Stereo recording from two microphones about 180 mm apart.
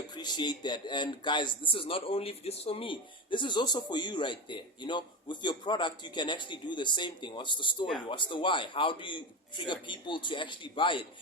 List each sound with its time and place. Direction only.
0.1 s a man's voice: 25° left (ahead or behind)